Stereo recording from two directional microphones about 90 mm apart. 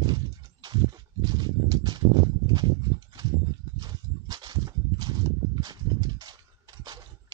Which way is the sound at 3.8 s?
50° right (ahead or behind).